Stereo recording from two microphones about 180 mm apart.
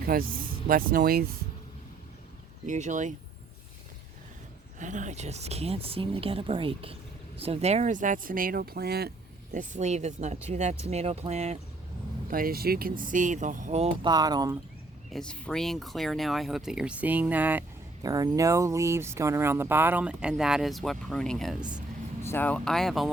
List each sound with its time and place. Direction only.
0.0 s speech: 55° right (ahead or behind)
2.6 s speech: 45° right (ahead or behind)
4.8 s speech: 45° right (ahead or behind); by 9.1 s 60° right (ahead or behind)
9.6 s speech: 40° right (ahead or behind)
12.3 s speech: 55° right (ahead or behind)
13.0 s speech: 45° right (ahead or behind)
14.1 s speech: 20° right (ahead or behind)
15.1 s speech: 5° left (ahead or behind)
18.0 s speech: 20° right (ahead or behind); by 21.7 s centre (ahead or behind)
22.2 s speech: 10° left (ahead or behind)